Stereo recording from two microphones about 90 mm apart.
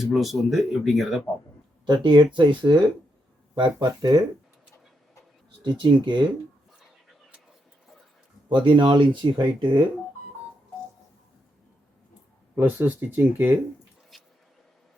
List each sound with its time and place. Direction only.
0.0 s speech: centre (ahead or behind)
1.9 s speech: 60° right (ahead or behind)
5.6 s speech: 60° right (ahead or behind)
8.4 s speech: 65° right (ahead or behind)
12.5 s speech: 20° right (ahead or behind)
14.1 s a sound: centre (ahead or behind)